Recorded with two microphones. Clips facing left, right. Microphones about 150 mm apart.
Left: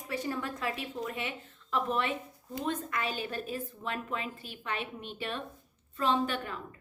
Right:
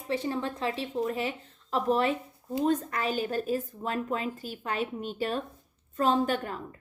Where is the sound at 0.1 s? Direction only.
25° right (ahead or behind).